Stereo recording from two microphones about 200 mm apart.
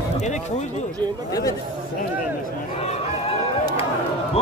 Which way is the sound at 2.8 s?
30° left (ahead or behind).